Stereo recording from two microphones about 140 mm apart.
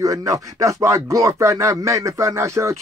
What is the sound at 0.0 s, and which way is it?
Speech, 25° right (ahead or behind).